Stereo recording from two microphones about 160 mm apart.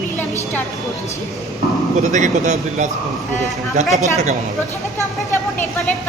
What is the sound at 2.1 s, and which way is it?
Speech, 50° right (ahead or behind).